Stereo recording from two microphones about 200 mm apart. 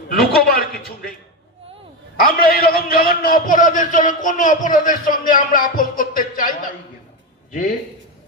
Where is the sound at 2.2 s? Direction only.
50° left (ahead or behind).